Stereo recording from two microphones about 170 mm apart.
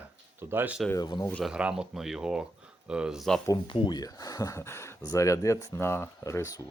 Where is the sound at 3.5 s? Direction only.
30° left (ahead or behind).